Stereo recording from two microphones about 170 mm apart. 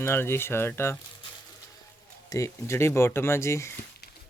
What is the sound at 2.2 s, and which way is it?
Speech, 20° left (ahead or behind).